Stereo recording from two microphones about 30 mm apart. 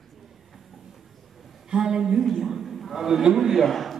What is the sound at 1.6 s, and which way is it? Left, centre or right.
A man's voice, right.